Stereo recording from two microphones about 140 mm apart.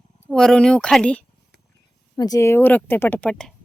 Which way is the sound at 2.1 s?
25° left (ahead or behind).